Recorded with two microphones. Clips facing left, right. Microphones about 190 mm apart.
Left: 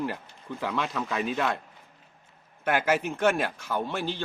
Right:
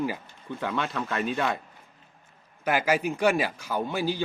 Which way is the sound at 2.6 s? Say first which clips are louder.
Right 1 dB; centre (ahead or behind).